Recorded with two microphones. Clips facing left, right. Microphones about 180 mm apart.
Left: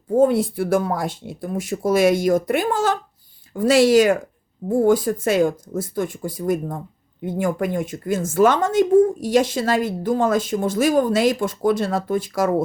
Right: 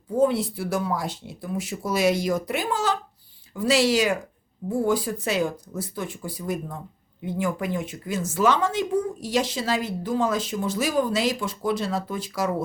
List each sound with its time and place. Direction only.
0.1 s speech: 50° left (ahead or behind)